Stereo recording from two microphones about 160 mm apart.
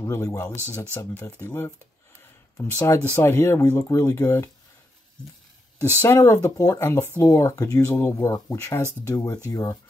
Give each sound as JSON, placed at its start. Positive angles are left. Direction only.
{"t": 0.0, "sound": "speech", "side_deg": 20}
{"t": 6.0, "sound": "speech", "side_deg": 20}